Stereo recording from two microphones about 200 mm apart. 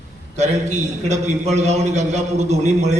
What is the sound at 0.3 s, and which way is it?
A man's voice, 35° right (ahead or behind).